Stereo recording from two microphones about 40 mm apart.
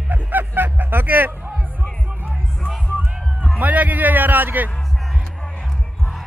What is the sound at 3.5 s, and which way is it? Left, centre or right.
A man's voice, right.